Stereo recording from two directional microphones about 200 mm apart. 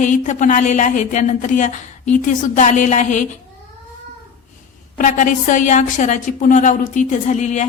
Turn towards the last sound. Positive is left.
turn(degrees=35)  # may be behind; listen again after turning